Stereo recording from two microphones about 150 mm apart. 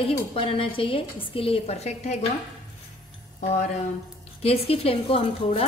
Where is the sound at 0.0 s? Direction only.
35° left (ahead or behind).